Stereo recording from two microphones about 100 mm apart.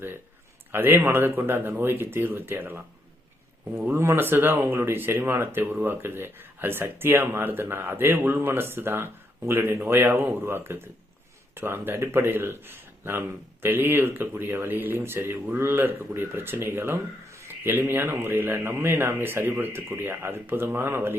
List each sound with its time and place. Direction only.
0.7 s speech: 20° right (ahead or behind)
3.8 s speech: 25° right (ahead or behind)